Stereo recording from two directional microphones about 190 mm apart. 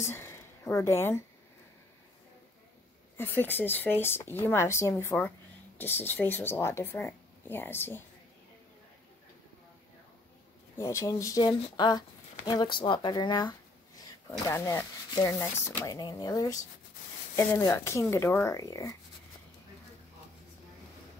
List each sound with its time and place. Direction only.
0.0 s speech: 15° left (ahead or behind)
3.2 s speech: 10° left (ahead or behind)
10.8 s speech: 15° left (ahead or behind)